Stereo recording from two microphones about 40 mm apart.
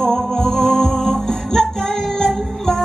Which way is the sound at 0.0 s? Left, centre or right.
Centre.